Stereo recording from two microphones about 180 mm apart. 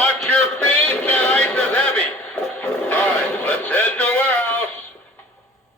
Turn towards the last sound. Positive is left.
turn(degrees=10)  # may be behind; listen again after turning